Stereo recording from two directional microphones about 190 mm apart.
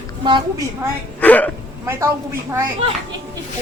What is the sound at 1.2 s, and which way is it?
Speech, 10° left (ahead or behind).